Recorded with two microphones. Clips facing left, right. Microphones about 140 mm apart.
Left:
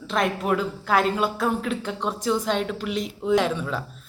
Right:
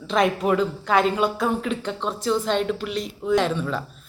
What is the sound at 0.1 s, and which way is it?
A woman's voice, centre (ahead or behind).